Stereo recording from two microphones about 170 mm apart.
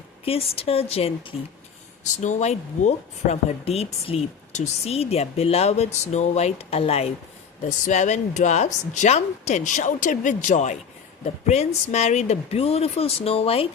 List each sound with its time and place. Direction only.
0.3 s speech: 35° left (ahead or behind)